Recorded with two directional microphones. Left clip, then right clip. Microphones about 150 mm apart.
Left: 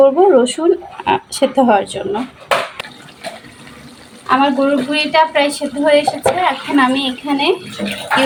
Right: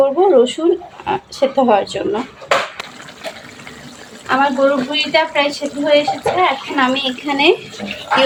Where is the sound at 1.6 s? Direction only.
5° left (ahead or behind).